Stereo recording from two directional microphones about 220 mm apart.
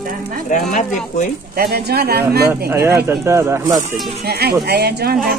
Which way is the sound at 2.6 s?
10° right (ahead or behind).